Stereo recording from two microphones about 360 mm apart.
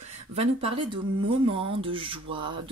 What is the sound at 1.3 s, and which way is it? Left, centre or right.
Speech, centre.